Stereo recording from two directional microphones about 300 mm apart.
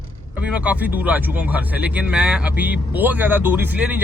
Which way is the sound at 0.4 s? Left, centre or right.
Centre.